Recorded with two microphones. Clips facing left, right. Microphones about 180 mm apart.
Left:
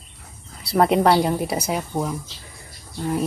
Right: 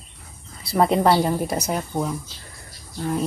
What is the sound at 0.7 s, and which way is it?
Speech, centre (ahead or behind).